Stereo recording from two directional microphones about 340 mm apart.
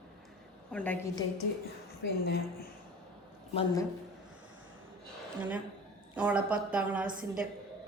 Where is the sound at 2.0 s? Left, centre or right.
Left.